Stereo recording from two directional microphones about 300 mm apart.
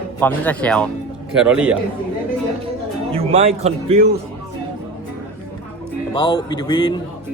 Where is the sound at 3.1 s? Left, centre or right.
Centre.